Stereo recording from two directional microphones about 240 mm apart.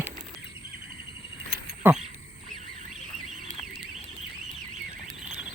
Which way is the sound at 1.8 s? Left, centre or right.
Centre.